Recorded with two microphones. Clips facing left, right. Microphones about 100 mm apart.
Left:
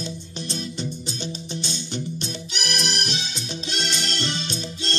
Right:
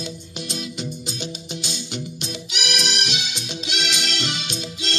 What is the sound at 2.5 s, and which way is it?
Music, 35° left (ahead or behind).